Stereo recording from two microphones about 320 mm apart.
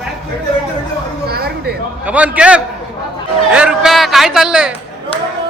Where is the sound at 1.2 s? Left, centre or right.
Right.